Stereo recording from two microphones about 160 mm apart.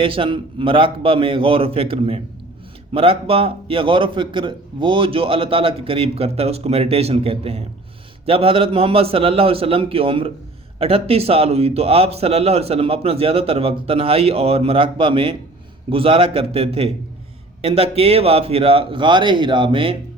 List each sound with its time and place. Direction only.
0.0 s a man's voice: 35° right (ahead or behind)